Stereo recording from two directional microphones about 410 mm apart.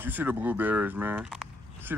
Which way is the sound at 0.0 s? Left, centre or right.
Centre.